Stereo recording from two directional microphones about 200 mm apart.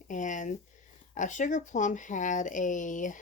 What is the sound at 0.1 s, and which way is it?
Speech, 40° left (ahead or behind).